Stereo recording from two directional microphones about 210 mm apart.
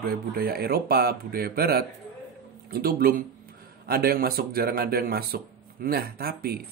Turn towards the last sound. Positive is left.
turn(degrees=-45)  # may be behind; listen again after turning